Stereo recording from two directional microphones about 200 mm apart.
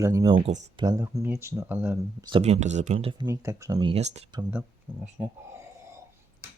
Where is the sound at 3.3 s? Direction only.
15° right (ahead or behind); by 4.2 s 35° right (ahead or behind).